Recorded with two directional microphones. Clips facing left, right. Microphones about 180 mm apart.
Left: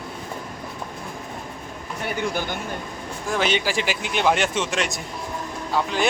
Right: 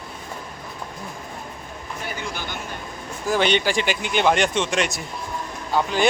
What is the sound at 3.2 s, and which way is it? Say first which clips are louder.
A man's voice: right 3 dB; centre (ahead or behind).